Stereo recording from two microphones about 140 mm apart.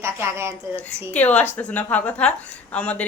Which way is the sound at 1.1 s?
10° left (ahead or behind).